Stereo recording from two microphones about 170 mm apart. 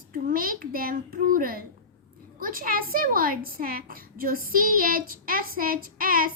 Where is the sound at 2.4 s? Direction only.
55° right (ahead or behind).